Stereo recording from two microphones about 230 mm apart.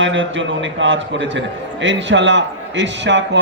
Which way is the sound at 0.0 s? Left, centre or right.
Right.